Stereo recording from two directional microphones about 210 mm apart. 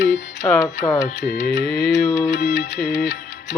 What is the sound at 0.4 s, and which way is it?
Music, 10° left (ahead or behind).